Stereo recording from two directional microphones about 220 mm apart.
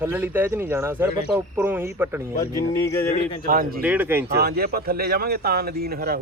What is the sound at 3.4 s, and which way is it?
Speech, 40° right (ahead or behind).